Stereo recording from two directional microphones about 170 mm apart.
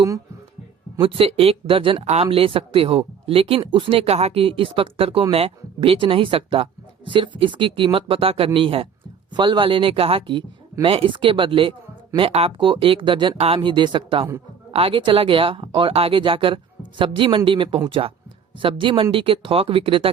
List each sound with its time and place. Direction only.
0.9 s speech: 35° right (ahead or behind)